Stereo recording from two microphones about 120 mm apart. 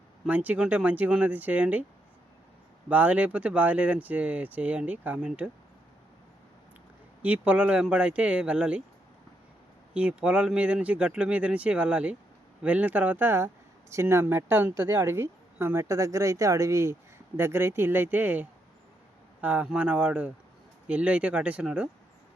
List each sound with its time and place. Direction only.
0.3 s speech: 10° right (ahead or behind)
2.9 s speech: 10° right (ahead or behind)
7.2 s speech: 10° right (ahead or behind)
9.9 s speech: 10° right (ahead or behind)